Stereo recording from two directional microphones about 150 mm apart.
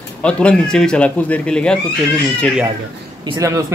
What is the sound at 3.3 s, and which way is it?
Speech, 20° right (ahead or behind).